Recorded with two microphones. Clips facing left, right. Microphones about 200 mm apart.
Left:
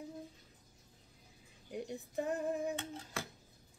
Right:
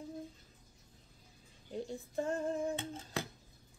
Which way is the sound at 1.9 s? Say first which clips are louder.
Right 1 dB; 15° left (ahead or behind).